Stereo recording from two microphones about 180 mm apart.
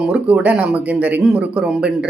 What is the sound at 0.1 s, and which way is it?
Speech, 5° right (ahead or behind).